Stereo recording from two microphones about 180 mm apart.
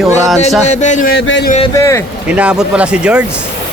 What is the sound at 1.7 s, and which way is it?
Music, 15° left (ahead or behind).